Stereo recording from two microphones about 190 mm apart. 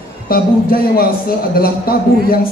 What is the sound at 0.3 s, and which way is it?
A man's voice, 50° left (ahead or behind).